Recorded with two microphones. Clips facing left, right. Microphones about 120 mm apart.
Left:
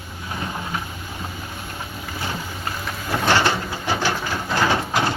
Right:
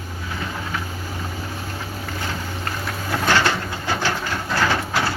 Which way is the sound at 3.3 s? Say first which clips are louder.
Left 1 dB; 15° left (ahead or behind).